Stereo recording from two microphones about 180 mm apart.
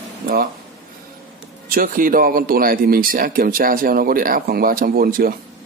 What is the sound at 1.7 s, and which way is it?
Speech, 50° right (ahead or behind).